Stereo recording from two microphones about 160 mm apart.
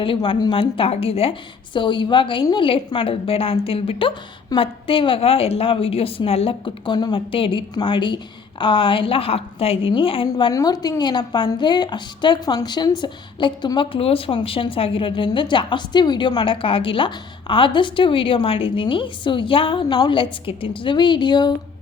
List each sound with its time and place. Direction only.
0.0 s a woman's voice: 30° left (ahead or behind)